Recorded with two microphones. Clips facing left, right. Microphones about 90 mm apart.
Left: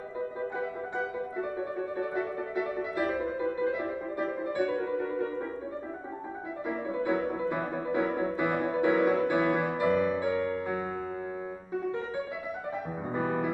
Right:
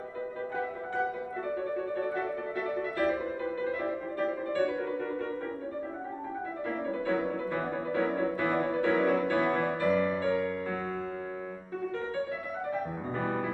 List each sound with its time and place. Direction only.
1.6 s music: 15° left (ahead or behind)
6.7 s music: 15° left (ahead or behind)
13.1 s music: 15° left (ahead or behind)